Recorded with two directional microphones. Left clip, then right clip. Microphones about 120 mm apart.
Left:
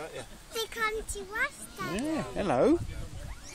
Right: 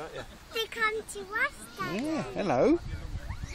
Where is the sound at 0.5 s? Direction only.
60° left (ahead or behind).